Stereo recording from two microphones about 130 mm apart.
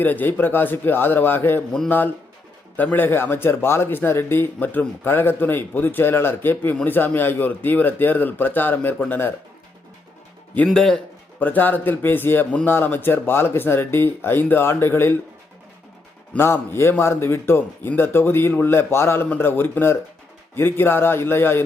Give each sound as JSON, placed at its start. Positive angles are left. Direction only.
{"t": 0.0, "sound": "speech", "side_deg": 15}
{"t": 10.7, "sound": "a man's voice", "side_deg": 5}
{"t": 11.3, "sound": "speech", "side_deg": 15}
{"t": 16.3, "sound": "speech", "side_deg": 20}